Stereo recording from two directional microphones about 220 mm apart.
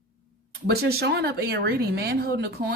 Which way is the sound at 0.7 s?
45° right (ahead or behind).